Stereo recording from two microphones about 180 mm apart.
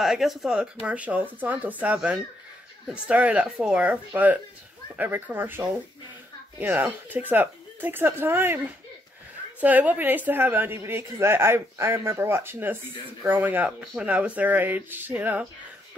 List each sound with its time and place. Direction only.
0.0 s a woman's voice: centre (ahead or behind)
6.6 s a woman's voice: 10° right (ahead or behind)
9.6 s a woman's voice: 10° right (ahead or behind)